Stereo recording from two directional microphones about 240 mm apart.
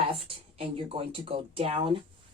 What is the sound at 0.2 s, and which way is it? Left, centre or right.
A woman's voice, right.